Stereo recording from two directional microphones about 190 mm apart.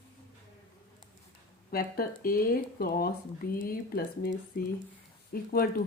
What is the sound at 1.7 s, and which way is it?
Speech, 50° left (ahead or behind).